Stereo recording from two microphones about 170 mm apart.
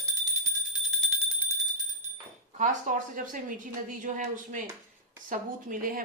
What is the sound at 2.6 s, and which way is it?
Speech, 50° right (ahead or behind).